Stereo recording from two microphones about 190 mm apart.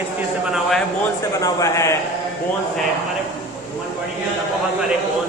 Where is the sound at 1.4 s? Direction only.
15° left (ahead or behind).